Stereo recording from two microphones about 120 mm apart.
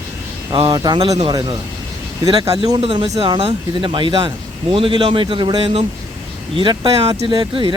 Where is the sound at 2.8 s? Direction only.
45° right (ahead or behind).